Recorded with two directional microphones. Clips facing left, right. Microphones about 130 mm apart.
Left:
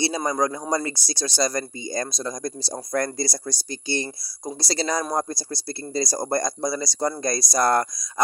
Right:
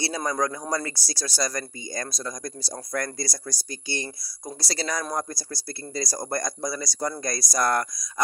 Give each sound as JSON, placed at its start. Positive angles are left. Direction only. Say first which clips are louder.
{"t": 0.0, "sound": "speech", "louder": "left 3 dB", "side_deg": 20}